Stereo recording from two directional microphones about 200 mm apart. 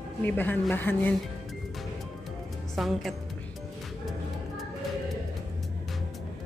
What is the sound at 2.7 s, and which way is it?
Speech, centre (ahead or behind).